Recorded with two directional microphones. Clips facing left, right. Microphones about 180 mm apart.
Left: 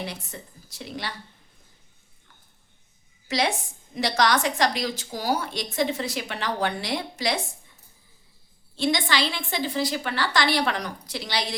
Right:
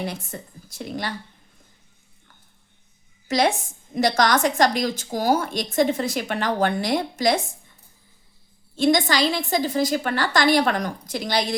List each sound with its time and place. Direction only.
0.0 s a woman's voice: 50° right (ahead or behind)
3.2 s a woman's voice: 45° right (ahead or behind)
8.7 s a woman's voice: 45° right (ahead or behind)